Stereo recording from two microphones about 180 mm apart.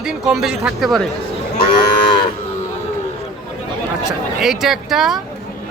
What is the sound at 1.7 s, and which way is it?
Moo, 25° left (ahead or behind).